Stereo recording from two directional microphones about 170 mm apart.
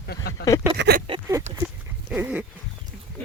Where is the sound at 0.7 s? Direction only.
70° right (ahead or behind).